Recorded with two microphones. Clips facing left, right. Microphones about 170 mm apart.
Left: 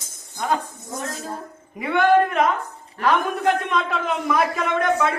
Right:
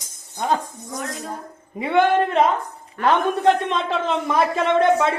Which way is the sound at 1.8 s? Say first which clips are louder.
Even; 25° right (ahead or behind).